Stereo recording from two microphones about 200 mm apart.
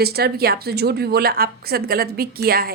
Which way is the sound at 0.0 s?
50° right (ahead or behind).